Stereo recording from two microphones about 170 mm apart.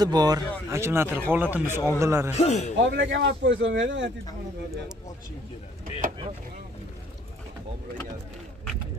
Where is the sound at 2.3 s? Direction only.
40° left (ahead or behind).